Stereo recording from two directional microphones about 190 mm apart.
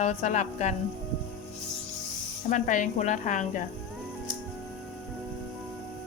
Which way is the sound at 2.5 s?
45° left (ahead or behind).